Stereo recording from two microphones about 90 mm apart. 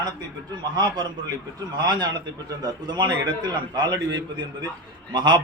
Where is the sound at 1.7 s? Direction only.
55° right (ahead or behind).